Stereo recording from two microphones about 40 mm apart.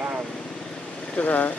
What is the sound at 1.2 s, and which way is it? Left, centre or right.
Speech, left.